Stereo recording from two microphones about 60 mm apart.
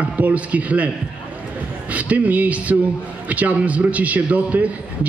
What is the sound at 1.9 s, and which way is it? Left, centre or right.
A man's voice, right.